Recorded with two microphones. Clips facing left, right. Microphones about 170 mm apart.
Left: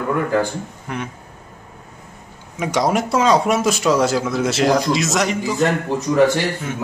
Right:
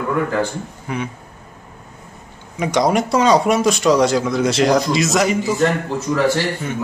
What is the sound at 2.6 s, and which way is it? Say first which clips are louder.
Speech: right 2 dB; 5° left (ahead or behind).